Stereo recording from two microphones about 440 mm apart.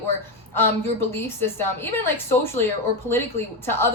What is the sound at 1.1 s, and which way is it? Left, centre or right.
A woman's voice, centre.